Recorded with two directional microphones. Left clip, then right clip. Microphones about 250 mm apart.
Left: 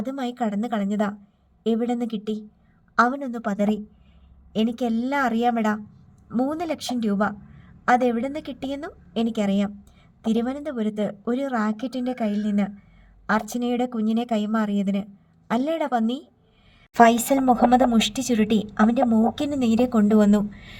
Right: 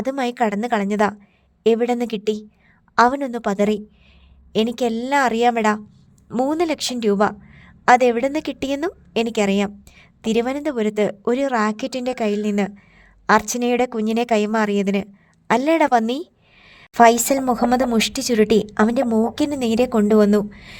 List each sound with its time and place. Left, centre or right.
0.0 s a woman's voice: right
16.6 s a sound: right
17.1 s a woman's voice: right